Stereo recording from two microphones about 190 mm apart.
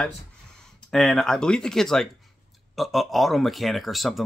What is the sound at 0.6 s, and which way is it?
Speech, 5° left (ahead or behind).